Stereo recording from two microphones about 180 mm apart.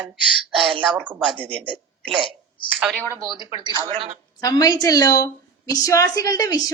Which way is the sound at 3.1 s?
20° right (ahead or behind).